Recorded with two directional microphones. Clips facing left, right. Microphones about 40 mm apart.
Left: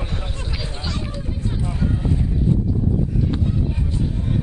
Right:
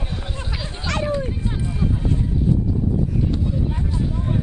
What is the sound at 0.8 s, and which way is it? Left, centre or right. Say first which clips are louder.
Hubbub: right 8 dB; right.